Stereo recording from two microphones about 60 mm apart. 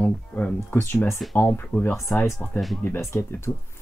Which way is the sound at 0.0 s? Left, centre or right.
Left.